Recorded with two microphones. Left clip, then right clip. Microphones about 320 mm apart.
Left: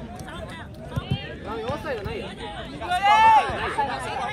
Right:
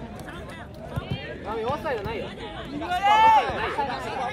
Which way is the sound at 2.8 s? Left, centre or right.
Left.